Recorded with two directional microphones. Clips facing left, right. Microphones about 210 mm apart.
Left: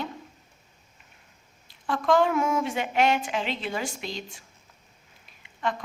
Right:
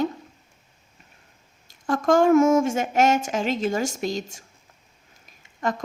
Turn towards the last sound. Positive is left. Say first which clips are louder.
# right 3 dB
turn(degrees=-45)  # may be behind; listen again after turning